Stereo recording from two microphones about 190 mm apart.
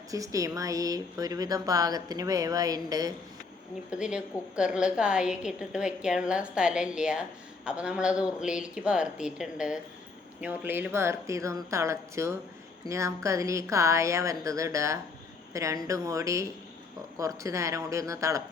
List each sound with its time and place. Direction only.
0.1 s a woman's voice: 15° right (ahead or behind)
3.9 s a woman's voice: 5° right (ahead or behind)